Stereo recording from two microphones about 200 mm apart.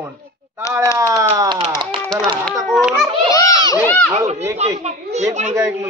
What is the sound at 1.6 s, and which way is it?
Speech, 25° right (ahead or behind).